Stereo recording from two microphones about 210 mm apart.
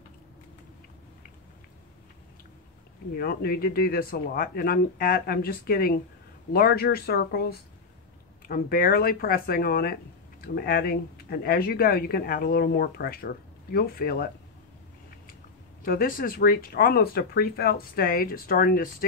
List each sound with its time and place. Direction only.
3.2 s speech: 45° left (ahead or behind)
15.8 s speech: 45° left (ahead or behind)